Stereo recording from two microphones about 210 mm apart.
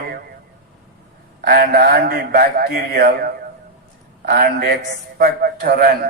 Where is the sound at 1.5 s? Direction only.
50° right (ahead or behind).